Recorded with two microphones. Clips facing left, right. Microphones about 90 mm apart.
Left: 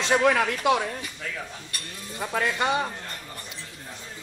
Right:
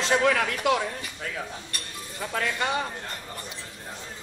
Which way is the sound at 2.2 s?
15° left (ahead or behind).